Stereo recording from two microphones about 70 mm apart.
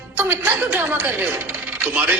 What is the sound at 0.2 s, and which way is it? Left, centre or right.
A man's voice, right.